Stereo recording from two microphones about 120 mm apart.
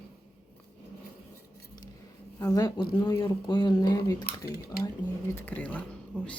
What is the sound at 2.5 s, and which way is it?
Speech, 35° left (ahead or behind).